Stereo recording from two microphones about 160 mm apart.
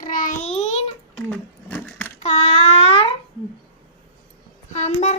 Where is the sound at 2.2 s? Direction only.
45° left (ahead or behind).